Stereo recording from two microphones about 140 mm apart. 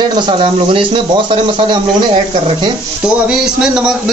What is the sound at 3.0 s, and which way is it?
Speech, 5° right (ahead or behind).